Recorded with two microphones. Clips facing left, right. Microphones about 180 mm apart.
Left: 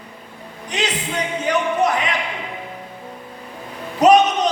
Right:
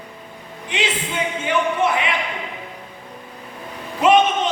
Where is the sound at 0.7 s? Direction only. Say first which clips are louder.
Even; 40° left (ahead or behind).